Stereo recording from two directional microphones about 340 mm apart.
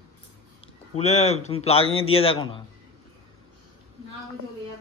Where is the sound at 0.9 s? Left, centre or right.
Centre.